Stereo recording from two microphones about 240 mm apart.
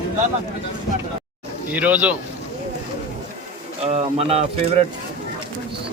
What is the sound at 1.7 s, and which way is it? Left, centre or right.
Speech, centre.